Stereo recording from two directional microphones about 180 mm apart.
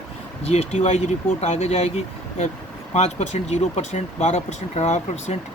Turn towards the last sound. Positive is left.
turn(degrees=40)  # may be behind; listen again after turning